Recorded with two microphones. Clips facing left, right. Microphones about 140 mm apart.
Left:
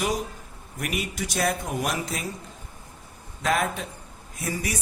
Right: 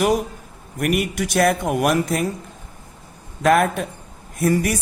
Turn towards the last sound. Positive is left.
turn(degrees=-55)  # may be behind; listen again after turning